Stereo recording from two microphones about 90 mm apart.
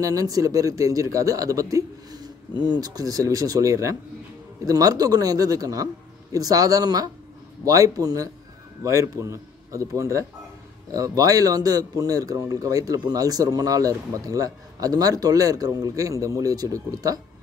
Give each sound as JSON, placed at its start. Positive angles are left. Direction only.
{"t": 0.0, "sound": "a man's voice", "side_deg": -40}